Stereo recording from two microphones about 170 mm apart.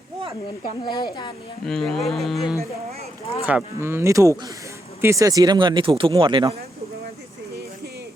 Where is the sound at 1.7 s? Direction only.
Centre (ahead or behind).